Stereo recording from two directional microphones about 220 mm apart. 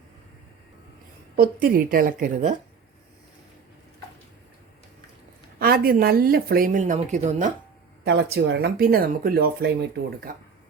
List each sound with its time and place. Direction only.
1.4 s a woman's voice: 40° right (ahead or behind)
5.5 s a woman's voice: 45° right (ahead or behind)
8.0 s a woman's voice: 50° right (ahead or behind)